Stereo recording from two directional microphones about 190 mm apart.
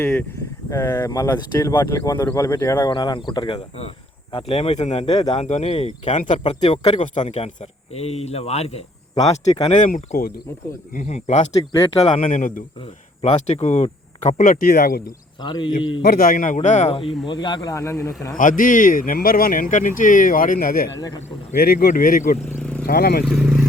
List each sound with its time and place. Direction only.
0.0 s speech: 10° left (ahead or behind); by 8.8 s 35° left (ahead or behind)
9.1 s speech: 20° left (ahead or behind)
9.8 s speech: 40° left (ahead or behind)
15.4 s speech: 25° left (ahead or behind)
16.0 s speech: 50° left (ahead or behind); by 18.3 s 15° left (ahead or behind)
18.3 s speech: 45° left (ahead or behind)
22.5 s vehicle: 5° left (ahead or behind)
22.9 s speech: 50° left (ahead or behind)
23.2 s speech: centre (ahead or behind)